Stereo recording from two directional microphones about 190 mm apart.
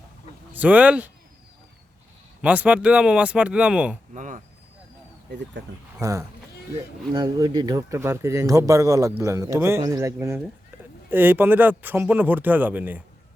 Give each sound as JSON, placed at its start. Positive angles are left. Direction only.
{"t": 0.5, "sound": "speech", "side_deg": -10}
{"t": 2.4, "sound": "speech", "side_deg": -5}
{"t": 4.1, "sound": "speech", "side_deg": -40}
{"t": 5.3, "sound": "speech", "side_deg": -65}
{"t": 6.0, "sound": "speech", "side_deg": -15}